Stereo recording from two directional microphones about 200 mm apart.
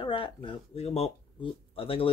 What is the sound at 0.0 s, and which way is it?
Speech, 25° left (ahead or behind).